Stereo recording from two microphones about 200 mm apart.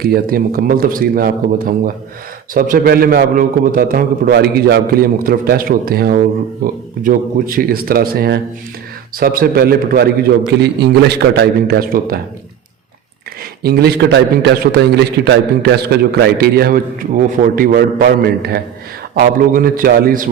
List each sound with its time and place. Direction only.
0.0 s a man's voice: 50° right (ahead or behind)
13.6 s a man's voice: 50° right (ahead or behind)